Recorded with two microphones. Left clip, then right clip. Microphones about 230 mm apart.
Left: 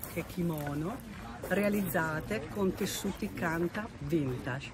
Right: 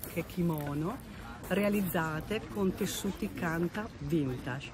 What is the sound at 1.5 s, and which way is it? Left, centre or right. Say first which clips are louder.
Speech: even; right.